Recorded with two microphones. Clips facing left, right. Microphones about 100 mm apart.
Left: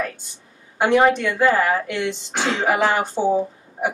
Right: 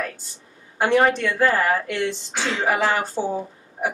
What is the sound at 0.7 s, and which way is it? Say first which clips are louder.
Speech: left 2 dB; 15° left (ahead or behind).